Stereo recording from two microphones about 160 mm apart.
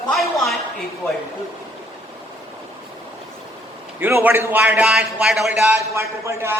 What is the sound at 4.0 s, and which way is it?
A man's voice, 15° right (ahead or behind).